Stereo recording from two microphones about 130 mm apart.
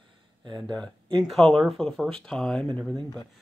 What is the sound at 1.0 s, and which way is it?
Speech, 40° right (ahead or behind).